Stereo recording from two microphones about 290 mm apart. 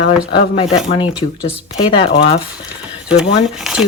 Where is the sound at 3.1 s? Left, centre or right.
Centre.